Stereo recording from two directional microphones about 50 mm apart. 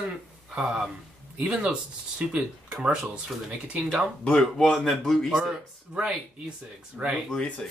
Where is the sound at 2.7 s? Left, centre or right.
Centre.